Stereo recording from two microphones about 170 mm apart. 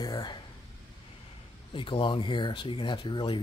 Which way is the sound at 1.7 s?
30° left (ahead or behind).